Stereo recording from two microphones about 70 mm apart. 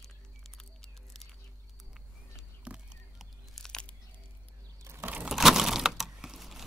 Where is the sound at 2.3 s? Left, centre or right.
Centre.